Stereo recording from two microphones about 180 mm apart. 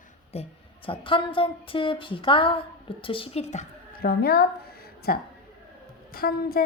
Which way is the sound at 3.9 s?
60° left (ahead or behind).